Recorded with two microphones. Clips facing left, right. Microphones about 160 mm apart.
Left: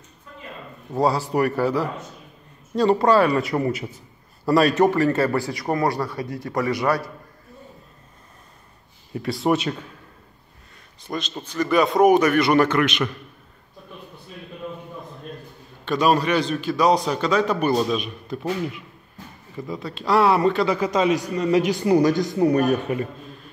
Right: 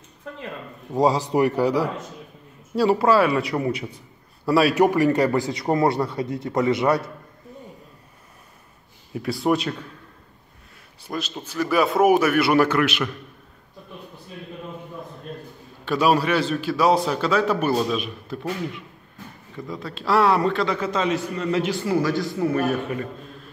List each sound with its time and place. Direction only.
0.3 s speech: 70° right (ahead or behind)
0.9 s a man's voice: 15° right (ahead or behind)
9.1 s a man's voice: centre (ahead or behind)
11.1 s a man's voice: 5° right (ahead or behind)
15.8 s a man's voice: 10° right (ahead or behind)
19.5 s a man's voice: centre (ahead or behind); by 22.8 s 20° left (ahead or behind)